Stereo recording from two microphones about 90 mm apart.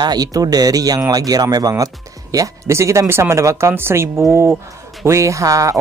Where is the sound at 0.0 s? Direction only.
45° right (ahead or behind).